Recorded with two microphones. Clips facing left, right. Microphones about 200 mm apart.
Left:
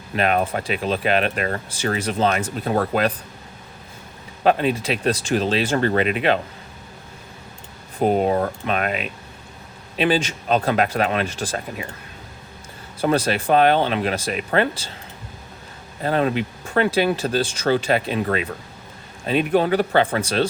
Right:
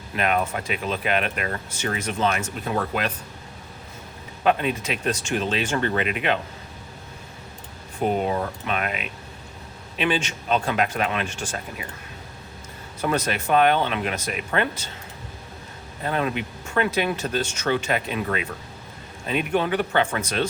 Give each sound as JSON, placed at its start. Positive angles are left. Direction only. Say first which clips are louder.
{"t": 0.2, "sound": "speech", "louder": "left 3 dB", "side_deg": 35}
{"t": 4.4, "sound": "speech", "louder": "left 4 dB", "side_deg": 35}
{"t": 7.9, "sound": "speech", "louder": "left 5 dB", "side_deg": 35}
{"t": 13.0, "sound": "speech", "louder": "left 5 dB", "side_deg": 30}
{"t": 16.0, "sound": "speech", "louder": "left 5 dB", "side_deg": 35}